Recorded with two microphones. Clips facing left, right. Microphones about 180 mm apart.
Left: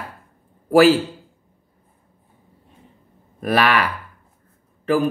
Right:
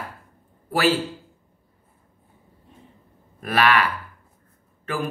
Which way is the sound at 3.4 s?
40° left (ahead or behind).